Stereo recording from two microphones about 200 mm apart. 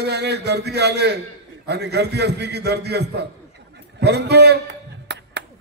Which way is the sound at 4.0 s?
55° right (ahead or behind).